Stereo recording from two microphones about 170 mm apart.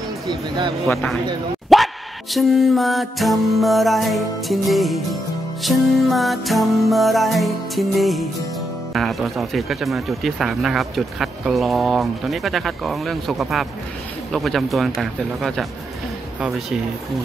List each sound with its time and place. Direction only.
0.3 s speech: 25° right (ahead or behind)
0.8 s speech: centre (ahead or behind)
1.7 s dog: centre (ahead or behind)
2.3 s speech: centre (ahead or behind)